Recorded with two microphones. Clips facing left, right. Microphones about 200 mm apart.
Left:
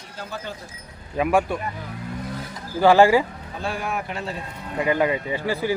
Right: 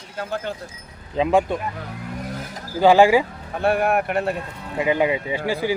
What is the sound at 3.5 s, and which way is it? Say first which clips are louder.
Speech: right 9 dB; 60° right (ahead or behind).